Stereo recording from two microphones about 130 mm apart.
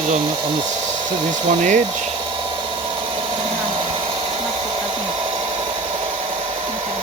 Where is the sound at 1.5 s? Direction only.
70° right (ahead or behind).